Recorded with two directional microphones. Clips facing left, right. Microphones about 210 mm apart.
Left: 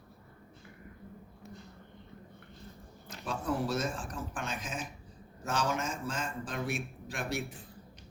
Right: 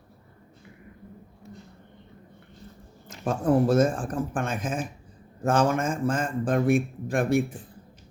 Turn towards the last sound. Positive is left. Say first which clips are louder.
# right 13 dB
turn(degrees=-50)  # may be behind; listen again after turning